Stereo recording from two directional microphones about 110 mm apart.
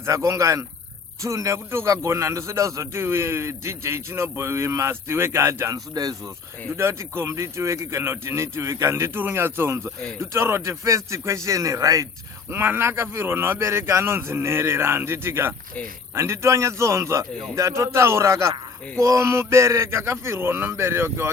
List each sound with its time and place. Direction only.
0.0 s a man's voice: 25° right (ahead or behind)
12.5 s a man's voice: 20° right (ahead or behind)